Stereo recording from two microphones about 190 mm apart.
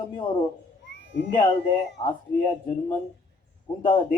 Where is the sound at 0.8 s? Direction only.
70° left (ahead or behind).